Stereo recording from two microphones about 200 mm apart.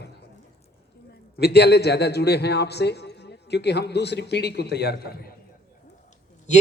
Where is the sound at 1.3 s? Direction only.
55° left (ahead or behind).